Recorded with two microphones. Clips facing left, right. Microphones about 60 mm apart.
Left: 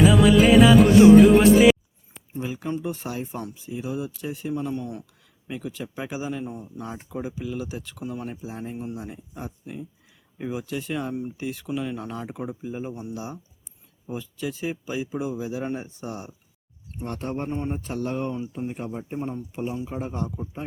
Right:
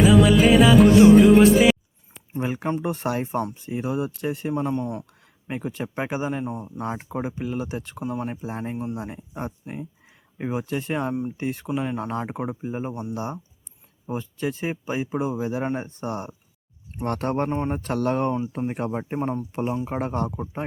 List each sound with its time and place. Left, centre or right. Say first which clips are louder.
0.0 s music: even; centre
2.3 s speech: right 3 dB; right
6.4 s speech: right 4 dB; right
7.9 s speech: right 4 dB; right
8.4 s speech: right 4 dB; right
17.0 s speech: right 6 dB; right